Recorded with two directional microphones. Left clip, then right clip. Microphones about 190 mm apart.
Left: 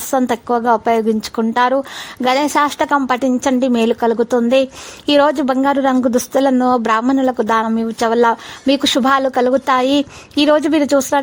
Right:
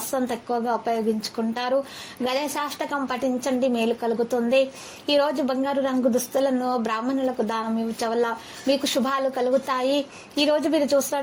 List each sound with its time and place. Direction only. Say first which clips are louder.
0.1 s a woman's voice: left 10 dB; 50° left (ahead or behind)